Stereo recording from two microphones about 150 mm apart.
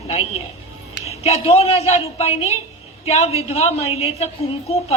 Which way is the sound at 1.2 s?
45° left (ahead or behind).